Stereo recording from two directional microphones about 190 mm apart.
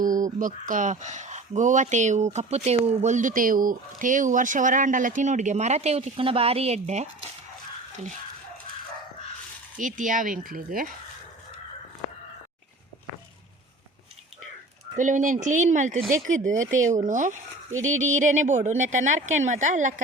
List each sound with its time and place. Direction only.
0.0 s speech: 45° right (ahead or behind)
9.7 s speech: 45° right (ahead or behind)
14.9 s speech: 40° right (ahead or behind)